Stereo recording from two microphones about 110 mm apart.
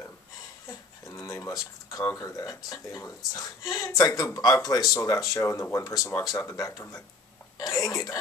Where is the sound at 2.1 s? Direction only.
30° left (ahead or behind).